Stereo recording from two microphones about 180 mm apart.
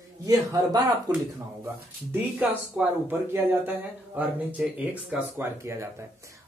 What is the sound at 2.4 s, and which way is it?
Speech, 10° right (ahead or behind).